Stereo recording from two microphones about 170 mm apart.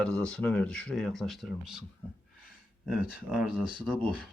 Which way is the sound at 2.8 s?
5° right (ahead or behind).